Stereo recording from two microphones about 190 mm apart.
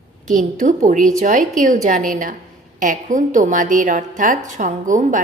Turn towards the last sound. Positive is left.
turn(degrees=-40)  # may be behind; listen again after turning